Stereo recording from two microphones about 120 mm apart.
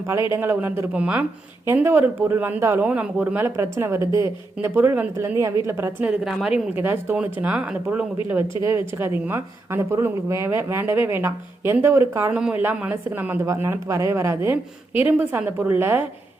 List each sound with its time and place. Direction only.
0.0 s speech: 20° right (ahead or behind)
6.1 s speech: 5° right (ahead or behind)